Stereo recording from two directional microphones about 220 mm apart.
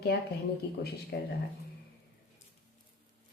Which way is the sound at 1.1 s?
50° left (ahead or behind).